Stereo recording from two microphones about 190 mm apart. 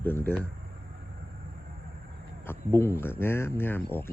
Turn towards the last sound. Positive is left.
turn(degrees=10)  # may be behind; listen again after turning